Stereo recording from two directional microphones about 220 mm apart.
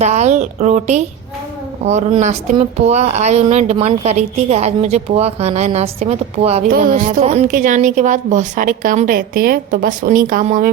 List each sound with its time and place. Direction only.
0.0 s a woman's voice: 30° right (ahead or behind)
6.7 s a woman's voice: 40° right (ahead or behind)